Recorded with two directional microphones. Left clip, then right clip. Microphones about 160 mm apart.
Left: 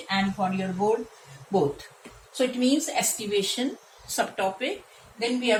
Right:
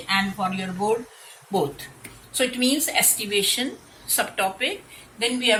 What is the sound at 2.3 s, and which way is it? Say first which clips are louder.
A woman's voice: right 2 dB; 10° left (ahead or behind).